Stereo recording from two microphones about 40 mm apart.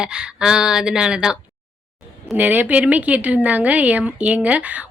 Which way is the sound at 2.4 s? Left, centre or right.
Right.